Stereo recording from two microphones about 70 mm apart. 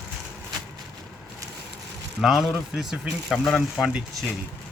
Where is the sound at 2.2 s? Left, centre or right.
Centre.